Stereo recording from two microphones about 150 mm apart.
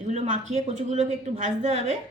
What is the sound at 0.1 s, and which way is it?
A woman's voice, 50° right (ahead or behind).